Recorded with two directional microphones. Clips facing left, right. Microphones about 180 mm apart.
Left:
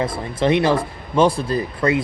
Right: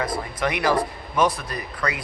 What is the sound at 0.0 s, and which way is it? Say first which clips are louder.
Speech: left 5 dB; 25° left (ahead or behind).